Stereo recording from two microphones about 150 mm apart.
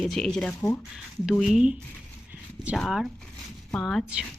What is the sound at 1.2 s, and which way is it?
Speech, centre (ahead or behind).